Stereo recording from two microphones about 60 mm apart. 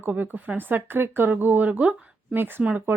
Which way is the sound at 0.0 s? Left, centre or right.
Right.